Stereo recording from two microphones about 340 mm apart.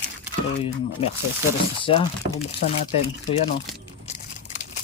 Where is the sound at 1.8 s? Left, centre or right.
Centre.